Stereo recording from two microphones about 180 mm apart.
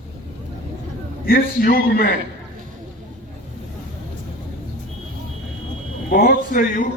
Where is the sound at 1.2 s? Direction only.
55° left (ahead or behind).